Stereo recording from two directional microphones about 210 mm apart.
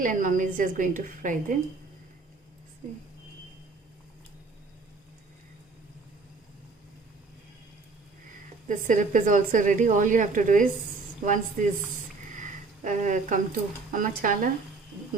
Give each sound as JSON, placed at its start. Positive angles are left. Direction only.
{"t": 0.0, "sound": "speech", "side_deg": -40}
{"t": 8.6, "sound": "speech", "side_deg": -35}
{"t": 12.4, "sound": "speech", "side_deg": -35}